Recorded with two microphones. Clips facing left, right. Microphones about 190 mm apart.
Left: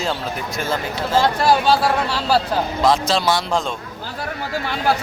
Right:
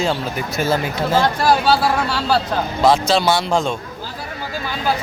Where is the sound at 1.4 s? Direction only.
Centre (ahead or behind).